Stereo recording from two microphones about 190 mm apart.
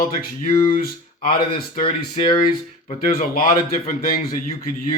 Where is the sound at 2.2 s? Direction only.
25° left (ahead or behind).